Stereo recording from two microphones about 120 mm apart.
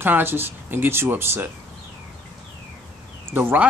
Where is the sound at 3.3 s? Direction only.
15° right (ahead or behind).